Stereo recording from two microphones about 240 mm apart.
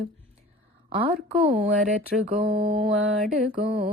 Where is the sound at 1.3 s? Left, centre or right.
Right.